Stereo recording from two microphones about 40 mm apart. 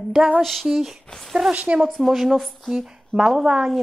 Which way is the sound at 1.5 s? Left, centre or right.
Right.